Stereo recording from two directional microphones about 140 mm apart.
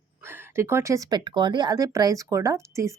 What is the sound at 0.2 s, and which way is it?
Speech, 15° right (ahead or behind).